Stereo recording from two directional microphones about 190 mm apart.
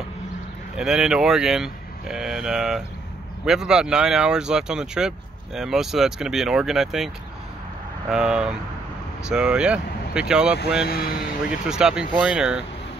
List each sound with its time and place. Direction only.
0.7 s speech: 5° right (ahead or behind)
8.1 s speech: 5° right (ahead or behind)
10.9 s speech: 55° left (ahead or behind)
11.7 s speech: 5° right (ahead or behind)